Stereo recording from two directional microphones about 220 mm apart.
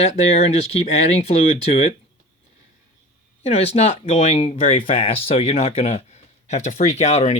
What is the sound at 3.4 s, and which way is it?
Speech, 25° left (ahead or behind).